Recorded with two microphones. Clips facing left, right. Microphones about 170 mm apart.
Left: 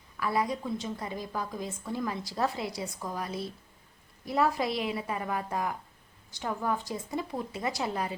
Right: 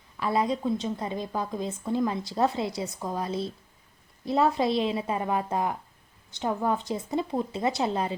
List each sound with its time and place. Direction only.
0.2 s a woman's voice: 25° right (ahead or behind)